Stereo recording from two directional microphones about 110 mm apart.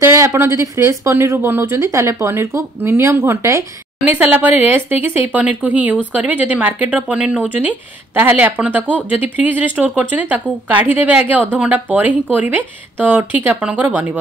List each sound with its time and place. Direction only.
0.0 s speech: 25° right (ahead or behind)